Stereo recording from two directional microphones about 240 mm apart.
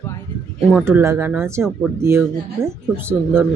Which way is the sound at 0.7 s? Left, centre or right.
Centre.